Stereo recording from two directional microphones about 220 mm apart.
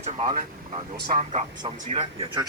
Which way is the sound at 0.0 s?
30° right (ahead or behind).